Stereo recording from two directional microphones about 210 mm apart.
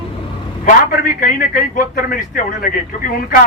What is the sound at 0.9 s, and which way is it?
A man's voice, 40° left (ahead or behind).